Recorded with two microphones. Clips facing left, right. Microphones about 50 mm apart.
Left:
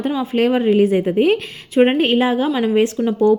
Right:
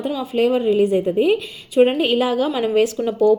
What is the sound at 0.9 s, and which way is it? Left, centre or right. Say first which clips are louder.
Speech: left 1 dB; left.